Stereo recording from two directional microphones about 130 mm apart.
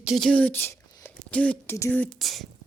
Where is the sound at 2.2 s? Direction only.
Centre (ahead or behind).